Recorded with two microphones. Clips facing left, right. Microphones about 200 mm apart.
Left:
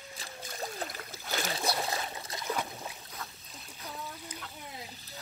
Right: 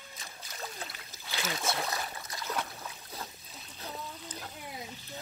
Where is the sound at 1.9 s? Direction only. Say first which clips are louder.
Left 2 dB; 25° left (ahead or behind).